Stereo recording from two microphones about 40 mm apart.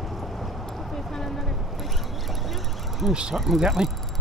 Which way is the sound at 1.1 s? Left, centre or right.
Centre.